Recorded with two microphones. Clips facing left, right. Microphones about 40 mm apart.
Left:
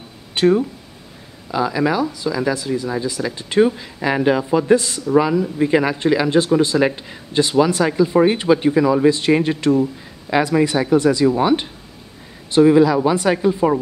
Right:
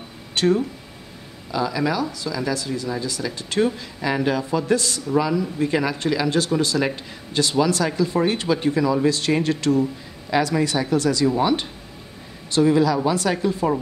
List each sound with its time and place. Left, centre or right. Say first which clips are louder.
0.3 s speech: left 4 dB; left